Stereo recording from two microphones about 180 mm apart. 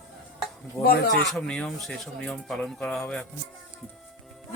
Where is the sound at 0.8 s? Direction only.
60° left (ahead or behind).